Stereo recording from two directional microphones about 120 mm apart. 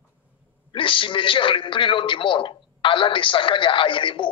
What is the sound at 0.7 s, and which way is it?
A man's voice, 45° left (ahead or behind).